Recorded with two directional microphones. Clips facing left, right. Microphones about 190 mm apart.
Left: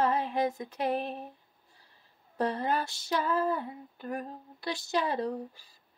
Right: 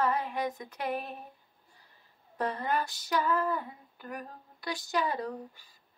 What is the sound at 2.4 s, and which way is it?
Female singing, 30° left (ahead or behind).